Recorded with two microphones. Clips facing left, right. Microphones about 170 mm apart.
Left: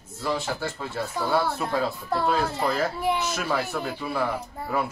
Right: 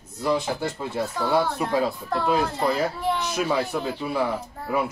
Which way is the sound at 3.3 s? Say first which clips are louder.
Right 3 dB; 15° right (ahead or behind).